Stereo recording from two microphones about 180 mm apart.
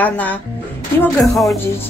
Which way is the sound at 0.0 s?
10° left (ahead or behind).